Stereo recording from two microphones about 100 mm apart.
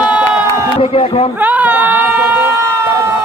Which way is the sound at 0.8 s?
70° left (ahead or behind).